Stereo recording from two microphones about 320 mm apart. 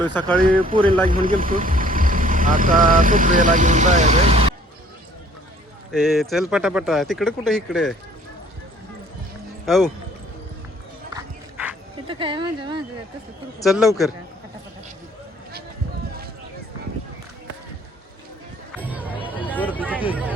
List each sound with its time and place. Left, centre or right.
0.0 s speech: centre
0.4 s speech: right
5.9 s speech: centre
9.6 s speech: centre
11.1 s dog: centre
12.0 s speech: centre
13.6 s speech: centre
18.8 s music: centre
19.7 s a sound: centre
20.1 s speech: centre